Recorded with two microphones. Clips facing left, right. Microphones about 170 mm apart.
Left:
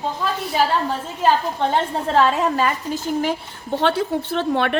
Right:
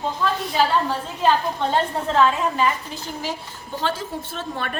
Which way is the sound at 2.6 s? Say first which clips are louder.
Left 2 dB; 50° left (ahead or behind).